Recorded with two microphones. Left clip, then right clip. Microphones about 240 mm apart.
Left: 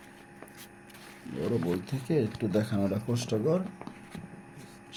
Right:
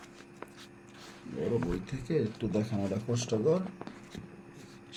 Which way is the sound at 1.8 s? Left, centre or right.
Left.